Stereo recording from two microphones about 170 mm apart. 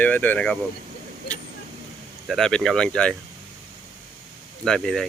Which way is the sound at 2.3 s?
Centre (ahead or behind).